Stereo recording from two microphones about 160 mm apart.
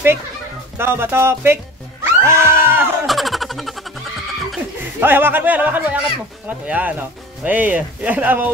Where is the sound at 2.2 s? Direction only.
15° right (ahead or behind).